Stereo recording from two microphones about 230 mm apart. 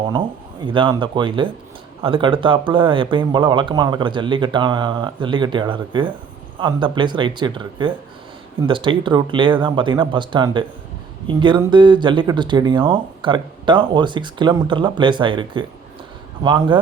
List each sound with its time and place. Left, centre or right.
0.6 s speech: right